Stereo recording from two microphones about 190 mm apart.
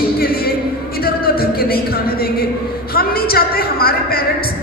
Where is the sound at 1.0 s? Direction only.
55° left (ahead or behind).